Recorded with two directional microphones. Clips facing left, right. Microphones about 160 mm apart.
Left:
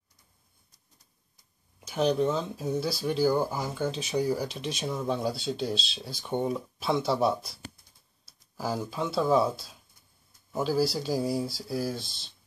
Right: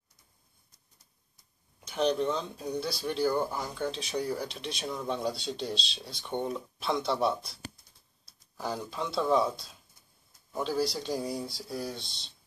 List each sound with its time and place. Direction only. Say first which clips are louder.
1.9 s speech: left 2 dB; 5° left (ahead or behind)